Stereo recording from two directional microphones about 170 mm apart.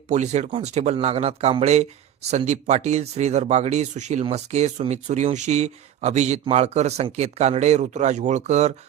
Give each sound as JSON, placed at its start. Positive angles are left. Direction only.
{"t": 0.1, "sound": "speech", "side_deg": -40}